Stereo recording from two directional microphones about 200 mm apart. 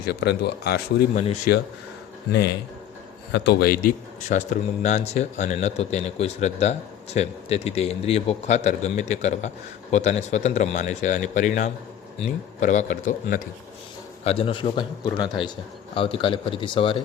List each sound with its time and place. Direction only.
0.0 s speech: 55° left (ahead or behind)
1.1 s speech: 30° left (ahead or behind)
2.3 s speech: 55° left (ahead or behind); by 13.5 s 40° left (ahead or behind)
14.3 s speech: 30° left (ahead or behind)
16.0 s speech: 25° left (ahead or behind)